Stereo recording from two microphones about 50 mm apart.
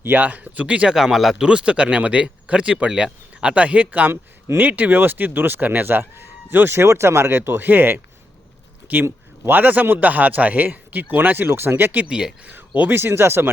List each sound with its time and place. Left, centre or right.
0.0 s a man's voice: right
0.9 s speech: centre
1.4 s speech: right
4.1 s speech: right
4.7 s speech: right
9.5 s a man's voice: right
11.4 s speech: right
12.0 s speech: centre
12.5 s speech: right